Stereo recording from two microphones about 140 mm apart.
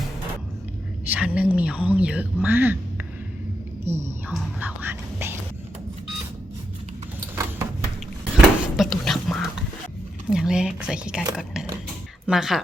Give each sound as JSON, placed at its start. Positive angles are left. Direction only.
{"t": 1.0, "sound": "a woman's voice", "side_deg": -10}
{"t": 3.9, "sound": "a woman's voice", "side_deg": -15}
{"t": 8.2, "sound": "a sound", "side_deg": 0}
{"t": 10.2, "sound": "a woman's voice", "side_deg": -5}